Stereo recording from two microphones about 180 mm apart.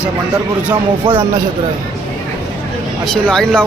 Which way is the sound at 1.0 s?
30° right (ahead or behind).